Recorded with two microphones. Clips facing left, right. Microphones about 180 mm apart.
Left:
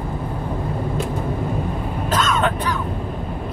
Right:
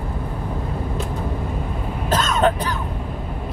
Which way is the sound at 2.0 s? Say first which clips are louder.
Right 2 dB; 30° right (ahead or behind).